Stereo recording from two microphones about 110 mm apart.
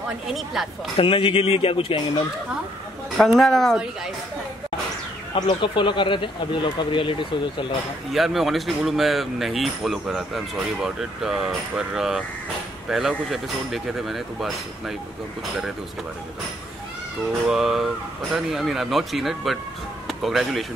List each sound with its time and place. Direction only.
0.9 s speech: 55° left (ahead or behind)
3.2 s speech: 5° left (ahead or behind)
5.3 s speech: 50° left (ahead or behind)
8.1 s speech: centre (ahead or behind)
17.5 s speech: 5° right (ahead or behind)